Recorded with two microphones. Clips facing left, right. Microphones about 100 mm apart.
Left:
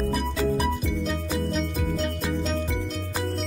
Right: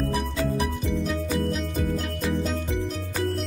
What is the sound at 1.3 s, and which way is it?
Music, centre (ahead or behind).